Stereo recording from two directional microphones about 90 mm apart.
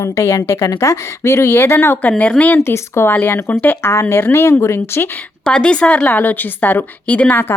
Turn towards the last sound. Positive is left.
turn(degrees=20)  # may be behind; listen again after turning